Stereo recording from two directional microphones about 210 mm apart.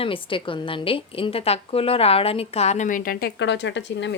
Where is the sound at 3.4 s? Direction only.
60° left (ahead or behind).